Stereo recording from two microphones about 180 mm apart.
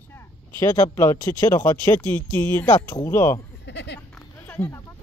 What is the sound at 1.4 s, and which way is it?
Speech, 15° left (ahead or behind).